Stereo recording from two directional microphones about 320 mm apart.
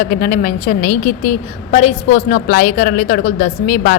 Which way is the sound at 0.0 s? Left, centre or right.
Left.